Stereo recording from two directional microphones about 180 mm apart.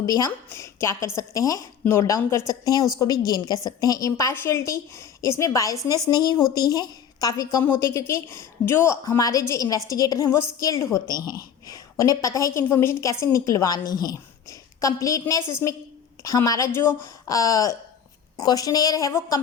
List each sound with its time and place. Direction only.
0.0 s a woman's voice: 20° left (ahead or behind)